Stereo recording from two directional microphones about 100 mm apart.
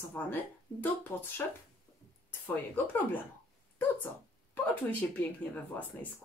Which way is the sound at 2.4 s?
20° left (ahead or behind).